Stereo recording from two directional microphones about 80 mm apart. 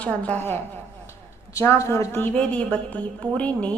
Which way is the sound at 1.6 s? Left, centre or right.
Left.